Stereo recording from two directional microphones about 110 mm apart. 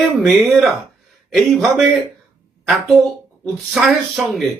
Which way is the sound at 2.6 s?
Centre (ahead or behind).